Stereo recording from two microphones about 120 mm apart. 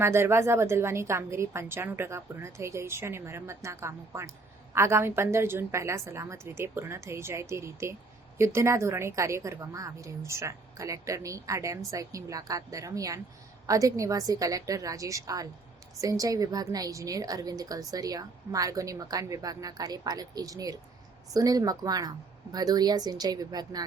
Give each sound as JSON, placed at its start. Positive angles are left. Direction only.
{"t": 0.0, "sound": "a woman's voice", "side_deg": -20}